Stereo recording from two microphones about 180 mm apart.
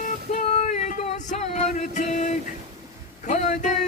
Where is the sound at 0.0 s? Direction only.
40° left (ahead or behind).